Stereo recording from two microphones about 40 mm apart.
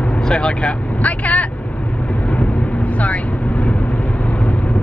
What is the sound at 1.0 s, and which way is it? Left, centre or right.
Speech, left.